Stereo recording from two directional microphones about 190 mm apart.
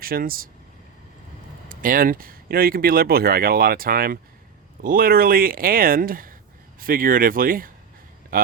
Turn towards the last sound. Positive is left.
turn(degrees=-50)  # may be behind; listen again after turning